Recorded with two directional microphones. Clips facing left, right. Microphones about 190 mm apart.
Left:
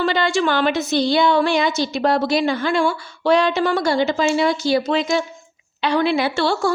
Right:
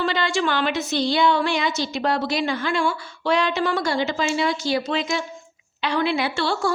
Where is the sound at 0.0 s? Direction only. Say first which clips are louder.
Left 4 dB; 45° left (ahead or behind).